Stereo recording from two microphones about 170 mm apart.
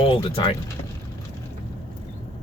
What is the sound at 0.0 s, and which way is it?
Speech, 30° left (ahead or behind).